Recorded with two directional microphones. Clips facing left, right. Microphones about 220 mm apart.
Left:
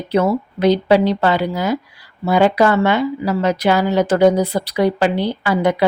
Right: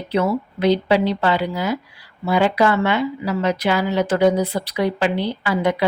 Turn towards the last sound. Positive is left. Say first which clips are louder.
# left 3 dB
turn(degrees=45)  # may be behind; listen again after turning